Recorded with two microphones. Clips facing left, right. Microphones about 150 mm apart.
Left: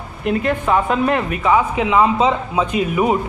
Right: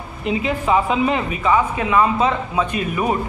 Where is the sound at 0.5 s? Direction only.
5° right (ahead or behind); by 3.2 s 15° left (ahead or behind).